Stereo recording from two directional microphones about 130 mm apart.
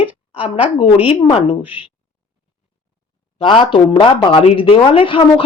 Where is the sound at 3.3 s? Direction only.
40° left (ahead or behind).